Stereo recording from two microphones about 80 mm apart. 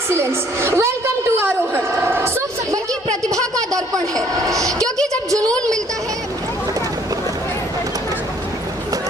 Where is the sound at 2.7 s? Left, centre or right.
Right.